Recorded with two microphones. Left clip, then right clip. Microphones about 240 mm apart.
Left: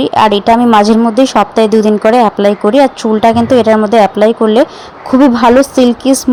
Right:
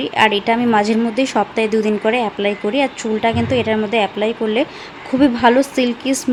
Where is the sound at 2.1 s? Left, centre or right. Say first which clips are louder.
Left 10 dB; left.